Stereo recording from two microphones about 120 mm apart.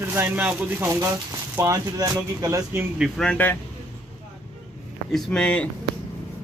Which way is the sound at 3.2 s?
10° left (ahead or behind).